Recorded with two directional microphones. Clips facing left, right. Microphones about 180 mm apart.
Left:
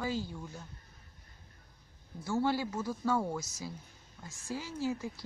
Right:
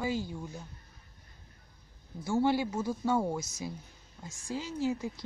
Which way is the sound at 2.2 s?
15° right (ahead or behind).